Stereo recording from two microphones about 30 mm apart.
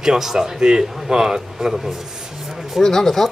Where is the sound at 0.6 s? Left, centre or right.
Right.